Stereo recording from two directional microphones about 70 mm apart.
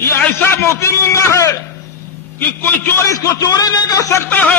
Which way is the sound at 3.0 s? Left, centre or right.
Left.